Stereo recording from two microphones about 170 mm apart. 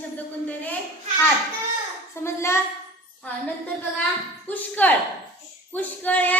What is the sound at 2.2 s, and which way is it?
Speech, 15° left (ahead or behind).